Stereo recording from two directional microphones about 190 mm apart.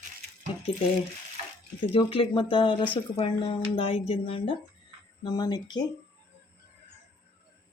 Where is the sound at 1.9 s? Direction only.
25° left (ahead or behind).